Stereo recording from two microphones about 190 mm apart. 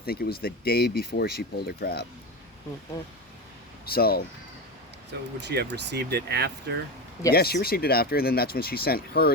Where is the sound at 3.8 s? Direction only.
55° left (ahead or behind).